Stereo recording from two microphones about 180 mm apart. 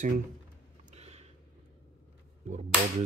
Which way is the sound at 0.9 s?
35° right (ahead or behind).